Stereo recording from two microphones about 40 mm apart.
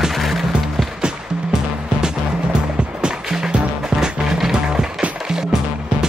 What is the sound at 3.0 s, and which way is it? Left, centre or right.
Music, centre.